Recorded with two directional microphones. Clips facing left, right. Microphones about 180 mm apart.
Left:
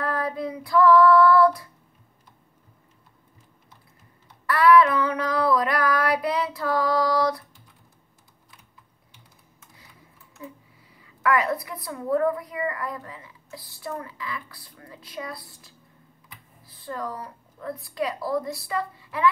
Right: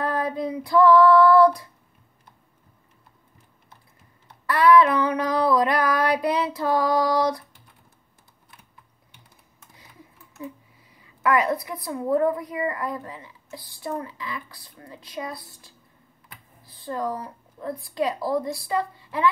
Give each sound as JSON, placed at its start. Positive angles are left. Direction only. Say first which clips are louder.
{"t": 0.0, "sound": "female singing", "louder": "right 2 dB", "side_deg": -25}
{"t": 4.5, "sound": "a sound", "louder": "even", "side_deg": -20}
{"t": 11.2, "sound": "a woman's voice", "louder": "right 1 dB", "side_deg": -20}
{"t": 16.7, "sound": "speech", "louder": "right 4 dB", "side_deg": -25}